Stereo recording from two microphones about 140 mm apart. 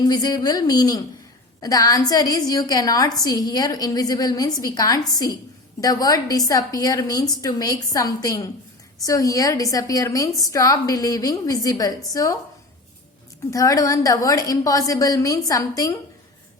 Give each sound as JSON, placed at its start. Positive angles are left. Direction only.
{"t": 0.0, "sound": "a woman's voice", "side_deg": 30}
{"t": 13.5, "sound": "a woman's voice", "side_deg": 25}